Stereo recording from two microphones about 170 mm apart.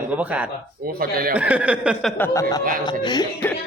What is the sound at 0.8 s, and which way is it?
Speech, 60° right (ahead or behind).